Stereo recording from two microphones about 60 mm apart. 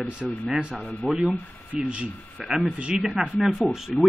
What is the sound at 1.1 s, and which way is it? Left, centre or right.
Speech, centre.